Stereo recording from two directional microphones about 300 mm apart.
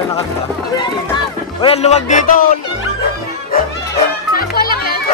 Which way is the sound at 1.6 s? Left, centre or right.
Left.